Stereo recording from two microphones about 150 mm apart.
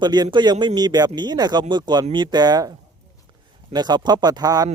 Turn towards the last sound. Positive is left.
turn(degrees=-25)  # may be behind; listen again after turning